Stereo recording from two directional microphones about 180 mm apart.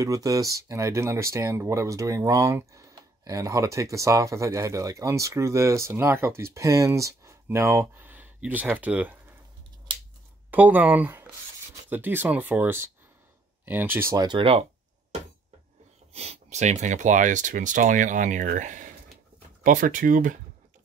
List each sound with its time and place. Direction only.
0.0 s speech: 20° right (ahead or behind)
10.5 s speech: 10° right (ahead or behind); by 14.7 s 30° right (ahead or behind)
16.1 s speech: 35° right (ahead or behind)